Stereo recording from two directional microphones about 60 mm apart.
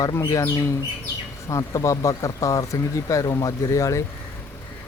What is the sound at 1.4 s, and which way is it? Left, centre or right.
Speech, left.